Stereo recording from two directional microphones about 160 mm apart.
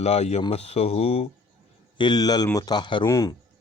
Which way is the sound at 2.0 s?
25° left (ahead or behind).